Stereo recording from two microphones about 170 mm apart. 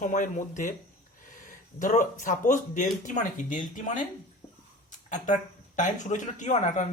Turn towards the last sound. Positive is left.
turn(degrees=45)  # may be behind; listen again after turning